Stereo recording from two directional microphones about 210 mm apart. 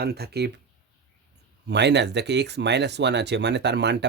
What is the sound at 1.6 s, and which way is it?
Speech, 55° right (ahead or behind).